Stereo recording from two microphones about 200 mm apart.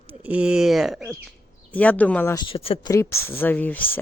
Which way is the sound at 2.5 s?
30° left (ahead or behind).